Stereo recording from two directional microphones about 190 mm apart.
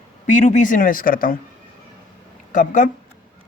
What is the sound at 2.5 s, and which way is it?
Speech, 45° left (ahead or behind).